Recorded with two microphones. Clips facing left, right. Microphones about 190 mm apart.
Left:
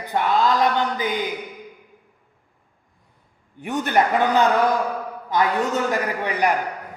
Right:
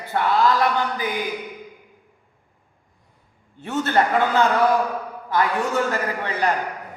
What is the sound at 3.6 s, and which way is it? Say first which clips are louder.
A man's voice: even; 15° left (ahead or behind).